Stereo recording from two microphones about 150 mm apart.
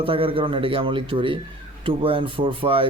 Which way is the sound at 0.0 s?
35° right (ahead or behind).